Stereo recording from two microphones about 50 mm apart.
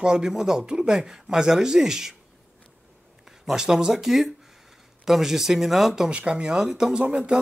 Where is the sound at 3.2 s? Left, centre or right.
Centre.